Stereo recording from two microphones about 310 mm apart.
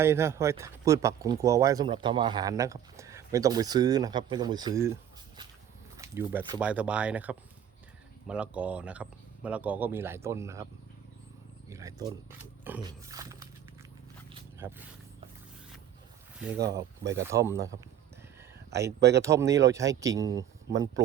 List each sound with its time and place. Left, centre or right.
0.0 s speech: centre
6.0 s speech: centre
11.7 s speech: centre
12.6 s roaring cats: centre
14.6 s speech: centre
16.4 s speech: centre
18.9 s speech: right
19.2 s speech: centre